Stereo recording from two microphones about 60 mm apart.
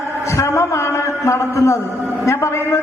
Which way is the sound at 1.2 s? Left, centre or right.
Left.